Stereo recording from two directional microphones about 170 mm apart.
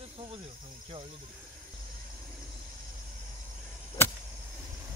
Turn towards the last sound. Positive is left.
turn(degrees=15)  # may be behind; listen again after turning